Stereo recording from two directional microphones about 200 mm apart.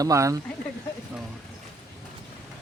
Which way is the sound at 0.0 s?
15° right (ahead or behind).